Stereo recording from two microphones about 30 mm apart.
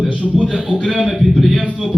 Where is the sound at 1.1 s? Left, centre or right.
Centre.